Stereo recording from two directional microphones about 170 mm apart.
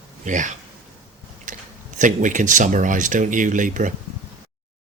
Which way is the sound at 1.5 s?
50° right (ahead or behind).